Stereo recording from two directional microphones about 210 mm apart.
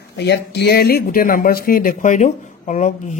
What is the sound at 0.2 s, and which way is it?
Speech, 50° left (ahead or behind).